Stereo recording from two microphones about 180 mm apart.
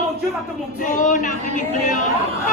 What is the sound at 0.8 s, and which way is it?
A woman's voice, 45° left (ahead or behind).